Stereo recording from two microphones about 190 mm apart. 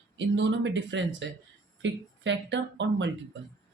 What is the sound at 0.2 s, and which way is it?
Speech, 70° right (ahead or behind).